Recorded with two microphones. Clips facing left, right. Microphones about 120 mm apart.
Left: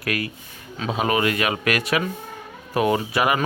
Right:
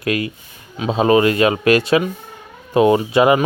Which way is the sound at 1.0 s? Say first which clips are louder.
Right 8 dB; 30° right (ahead or behind).